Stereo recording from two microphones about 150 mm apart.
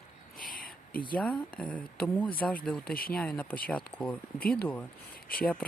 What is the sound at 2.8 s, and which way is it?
Speech, 80° left.